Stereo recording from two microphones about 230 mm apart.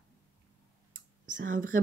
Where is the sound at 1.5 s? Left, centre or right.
Right.